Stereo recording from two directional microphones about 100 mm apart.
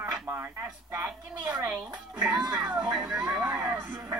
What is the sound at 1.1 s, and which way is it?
Speech, 10° right (ahead or behind).